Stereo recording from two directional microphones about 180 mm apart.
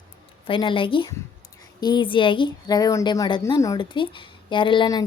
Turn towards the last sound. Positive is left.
turn(degrees=25)  # may be behind; listen again after turning